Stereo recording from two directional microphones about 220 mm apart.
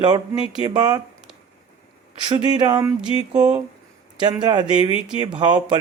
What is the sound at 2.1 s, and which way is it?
Speech, 20° right (ahead or behind).